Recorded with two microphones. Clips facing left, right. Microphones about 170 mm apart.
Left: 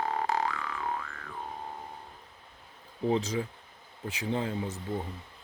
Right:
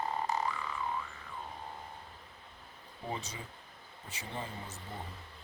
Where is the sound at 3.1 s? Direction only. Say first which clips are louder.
Left 12 dB; 90° left.